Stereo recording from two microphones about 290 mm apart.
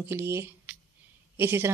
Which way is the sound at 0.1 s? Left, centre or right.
Centre.